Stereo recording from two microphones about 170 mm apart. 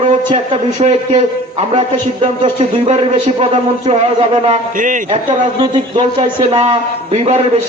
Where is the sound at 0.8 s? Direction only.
40° right (ahead or behind).